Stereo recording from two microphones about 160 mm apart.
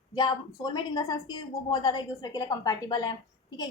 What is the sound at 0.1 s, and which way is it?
A woman's voice, 25° left (ahead or behind).